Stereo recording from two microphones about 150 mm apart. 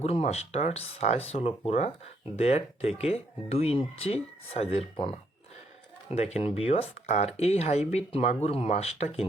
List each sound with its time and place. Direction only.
0.0 s speech: 45° left (ahead or behind)